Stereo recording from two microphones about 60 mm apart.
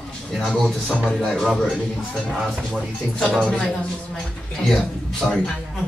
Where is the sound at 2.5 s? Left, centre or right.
Centre.